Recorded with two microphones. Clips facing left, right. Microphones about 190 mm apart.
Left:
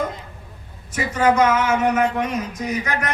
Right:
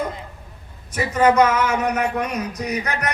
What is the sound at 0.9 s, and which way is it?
A man's voice, 40° right (ahead or behind).